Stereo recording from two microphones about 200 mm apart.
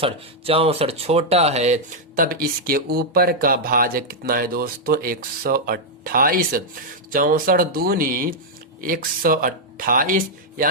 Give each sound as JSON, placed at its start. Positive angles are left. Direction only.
{"t": 0.0, "sound": "speech", "side_deg": -30}